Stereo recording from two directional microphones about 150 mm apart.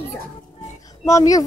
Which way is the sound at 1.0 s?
20° left (ahead or behind).